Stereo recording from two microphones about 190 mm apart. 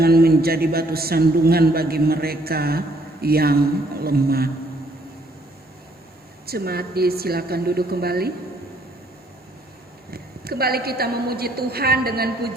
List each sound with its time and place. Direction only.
0.0 s a man's voice: 55° right (ahead or behind)
6.4 s a man's voice: 55° right (ahead or behind)
10.1 s a woman's voice: 55° right (ahead or behind)